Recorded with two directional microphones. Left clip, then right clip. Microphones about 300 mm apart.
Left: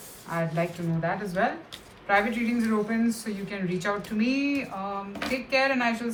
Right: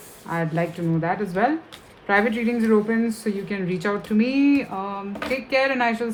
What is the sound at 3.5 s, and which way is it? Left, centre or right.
A woman's voice, right.